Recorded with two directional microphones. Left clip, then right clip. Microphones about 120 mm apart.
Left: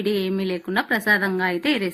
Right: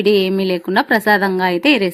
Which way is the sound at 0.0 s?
60° right (ahead or behind).